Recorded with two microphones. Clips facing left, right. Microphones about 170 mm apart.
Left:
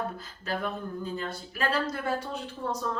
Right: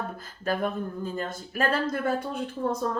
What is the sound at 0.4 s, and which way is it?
A woman's voice, 50° right (ahead or behind).